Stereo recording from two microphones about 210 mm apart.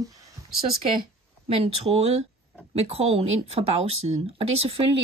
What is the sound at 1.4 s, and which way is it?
Speech, 25° right (ahead or behind).